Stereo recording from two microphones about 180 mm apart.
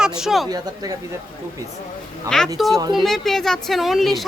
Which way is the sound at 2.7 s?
25° right (ahead or behind).